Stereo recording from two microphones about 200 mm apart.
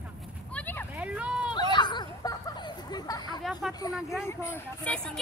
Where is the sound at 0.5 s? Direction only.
10° left (ahead or behind).